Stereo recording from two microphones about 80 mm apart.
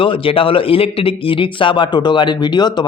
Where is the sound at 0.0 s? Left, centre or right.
Left.